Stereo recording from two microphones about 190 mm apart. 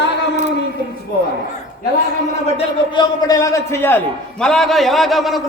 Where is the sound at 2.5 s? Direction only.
20° left (ahead or behind); by 5.4 s centre (ahead or behind).